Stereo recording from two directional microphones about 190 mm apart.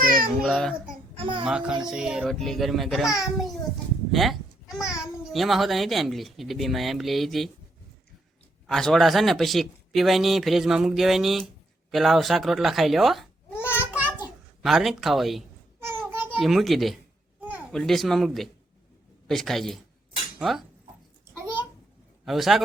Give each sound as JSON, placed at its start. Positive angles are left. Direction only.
{"t": 0.3, "sound": "speech", "side_deg": 0}
{"t": 1.1, "sound": "a child's voice", "side_deg": -30}
{"t": 1.5, "sound": "speech", "side_deg": -5}
{"t": 4.1, "sound": "a sound", "side_deg": 0}
{"t": 4.9, "sound": "speech", "side_deg": 0}
{"t": 8.6, "sound": "speech", "side_deg": 0}
{"t": 13.7, "sound": "a sound", "side_deg": -10}
{"t": 14.6, "sound": "speech", "side_deg": 0}
{"t": 16.0, "sound": "babbling", "side_deg": -10}
{"t": 17.7, "sound": "speech", "side_deg": 0}
{"t": 22.3, "sound": "speech", "side_deg": 0}